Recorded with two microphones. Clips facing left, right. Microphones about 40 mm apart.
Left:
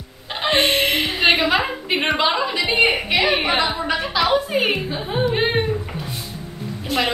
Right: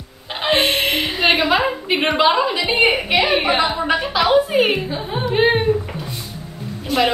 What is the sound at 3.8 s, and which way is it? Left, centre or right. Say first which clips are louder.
A woman's voice: right 2 dB; centre.